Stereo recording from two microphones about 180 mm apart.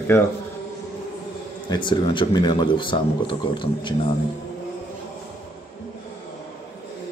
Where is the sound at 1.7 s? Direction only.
25° left (ahead or behind).